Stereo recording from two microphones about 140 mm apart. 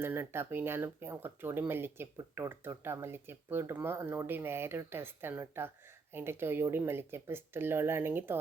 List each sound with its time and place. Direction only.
0.0 s speech: 15° right (ahead or behind)